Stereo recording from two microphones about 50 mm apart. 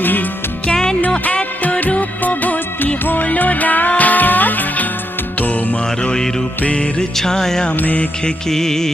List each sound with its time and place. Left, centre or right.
0.0 s music: left
0.7 s music: centre
1.2 s music: left
6.0 s music: centre
7.0 s music: centre
7.8 s music: left
8.2 s music: centre